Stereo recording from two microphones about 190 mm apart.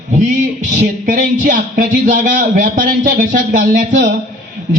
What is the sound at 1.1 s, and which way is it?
Speech, 45° right (ahead or behind).